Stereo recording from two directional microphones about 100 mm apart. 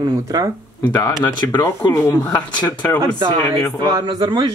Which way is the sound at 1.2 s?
20° left (ahead or behind).